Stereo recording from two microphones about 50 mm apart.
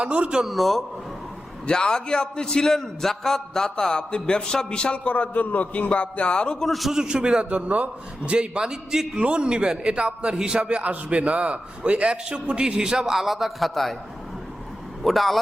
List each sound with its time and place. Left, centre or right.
0.0 s a man's voice: right
0.4 s a man's voice: centre
1.6 s a man's voice: centre
5.1 s a man's voice: left
6.7 s a man's voice: centre
6.9 s a man's voice: centre
7.5 s a man's voice: right; by 13.1 s centre
13.1 s a man's voice: centre
15.0 s a man's voice: centre